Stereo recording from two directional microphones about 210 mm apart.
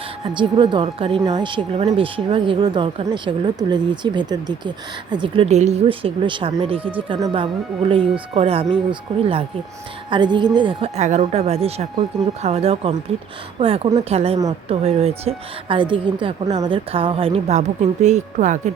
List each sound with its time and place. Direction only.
0.3 s speech: 20° right (ahead or behind)